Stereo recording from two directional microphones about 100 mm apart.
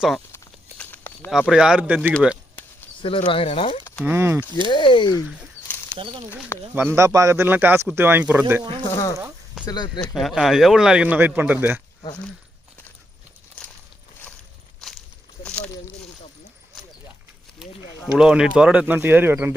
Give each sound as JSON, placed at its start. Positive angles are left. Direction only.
{"t": 0.8, "sound": "a sound", "side_deg": 20}
{"t": 1.3, "sound": "speech", "side_deg": -5}
{"t": 3.0, "sound": "speech", "side_deg": 60}
{"t": 4.0, "sound": "speech", "side_deg": -20}
{"t": 4.7, "sound": "speech", "side_deg": 55}
{"t": 5.9, "sound": "speech", "side_deg": -55}
{"t": 6.7, "sound": "speech", "side_deg": -25}
{"t": 9.6, "sound": "speech", "side_deg": 45}
{"t": 10.2, "sound": "speech", "side_deg": 0}
{"t": 15.4, "sound": "a sound", "side_deg": 10}
{"t": 18.1, "sound": "speech", "side_deg": -5}